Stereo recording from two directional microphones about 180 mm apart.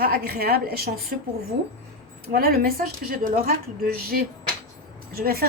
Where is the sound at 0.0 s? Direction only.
55° right (ahead or behind).